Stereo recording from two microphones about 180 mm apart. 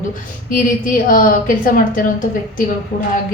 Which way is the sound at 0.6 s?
50° left (ahead or behind).